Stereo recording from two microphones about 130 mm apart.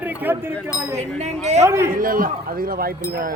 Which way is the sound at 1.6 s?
20° right (ahead or behind).